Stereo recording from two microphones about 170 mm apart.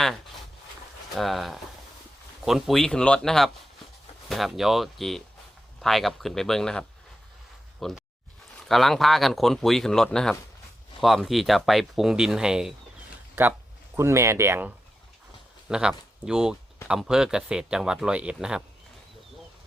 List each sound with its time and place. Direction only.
1.1 s speech: centre (ahead or behind)
13.9 s speech: 15° right (ahead or behind)
15.7 s speech: 5° right (ahead or behind)